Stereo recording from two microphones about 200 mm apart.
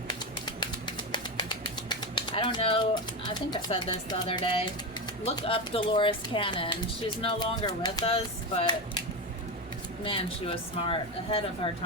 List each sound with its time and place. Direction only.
0.4 s bird: 20° left (ahead or behind)
5.4 s speech: 25° left (ahead or behind)